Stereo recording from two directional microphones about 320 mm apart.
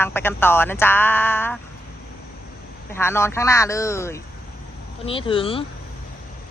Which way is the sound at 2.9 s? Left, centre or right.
Centre.